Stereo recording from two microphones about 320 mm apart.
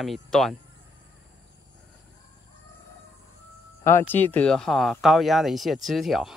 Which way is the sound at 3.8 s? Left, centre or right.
Centre.